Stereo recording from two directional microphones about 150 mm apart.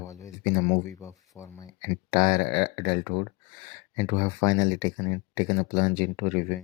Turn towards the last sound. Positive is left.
turn(degrees=15)  # may be behind; listen again after turning